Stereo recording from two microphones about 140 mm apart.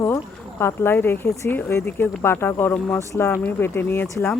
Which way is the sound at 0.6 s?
15° left (ahead or behind).